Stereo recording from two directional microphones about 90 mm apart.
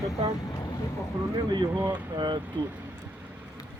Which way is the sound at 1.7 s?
20° right (ahead or behind).